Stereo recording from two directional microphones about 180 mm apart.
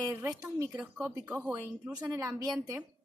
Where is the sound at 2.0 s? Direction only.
20° right (ahead or behind).